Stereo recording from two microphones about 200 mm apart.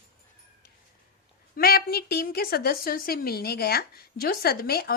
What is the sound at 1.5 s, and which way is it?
Speech, 50° left (ahead or behind).